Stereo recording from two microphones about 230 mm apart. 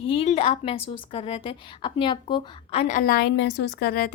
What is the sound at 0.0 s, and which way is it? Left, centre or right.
A woman's voice, left.